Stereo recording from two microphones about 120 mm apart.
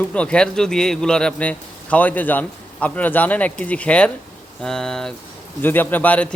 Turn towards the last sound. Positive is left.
turn(degrees=15)  # may be behind; listen again after turning